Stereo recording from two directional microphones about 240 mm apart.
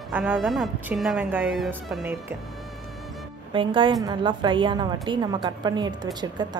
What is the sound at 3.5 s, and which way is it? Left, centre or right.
A woman's voice, right.